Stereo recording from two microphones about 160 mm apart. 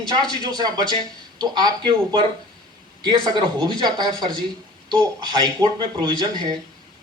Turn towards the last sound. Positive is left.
turn(degrees=-25)  # may be behind; listen again after turning